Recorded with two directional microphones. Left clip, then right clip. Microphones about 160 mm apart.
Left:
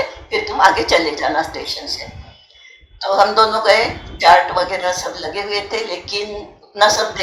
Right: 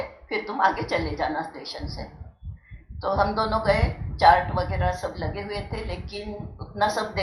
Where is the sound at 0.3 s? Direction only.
20° left (ahead or behind).